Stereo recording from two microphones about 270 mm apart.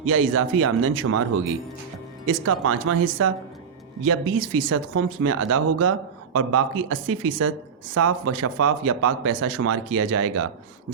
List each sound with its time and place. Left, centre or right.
0.0 s speech: right
8.0 s speech: right